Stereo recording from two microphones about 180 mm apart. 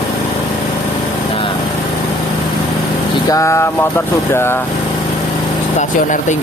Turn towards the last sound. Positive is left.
turn(degrees=45)  # may be behind; listen again after turning